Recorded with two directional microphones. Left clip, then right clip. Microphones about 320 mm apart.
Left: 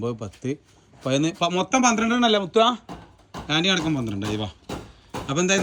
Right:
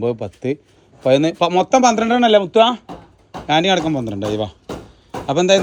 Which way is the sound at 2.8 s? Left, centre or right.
Centre.